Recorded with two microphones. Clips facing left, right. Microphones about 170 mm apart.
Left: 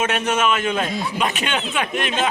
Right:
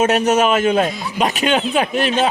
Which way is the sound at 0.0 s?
40° right (ahead or behind).